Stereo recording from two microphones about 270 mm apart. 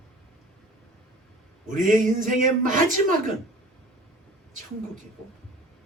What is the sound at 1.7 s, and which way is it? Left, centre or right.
Speech, right.